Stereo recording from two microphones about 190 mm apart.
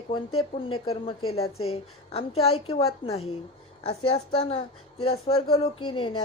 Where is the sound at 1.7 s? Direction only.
30° left (ahead or behind).